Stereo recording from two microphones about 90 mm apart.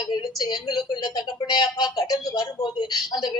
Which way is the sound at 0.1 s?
55° left (ahead or behind).